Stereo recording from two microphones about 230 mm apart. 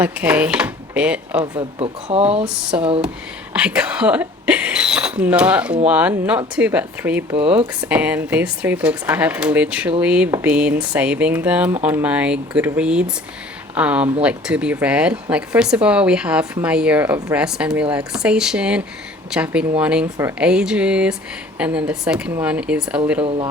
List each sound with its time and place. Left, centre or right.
0.0 s speech: centre
1.5 s speech: right
2.7 s speech: centre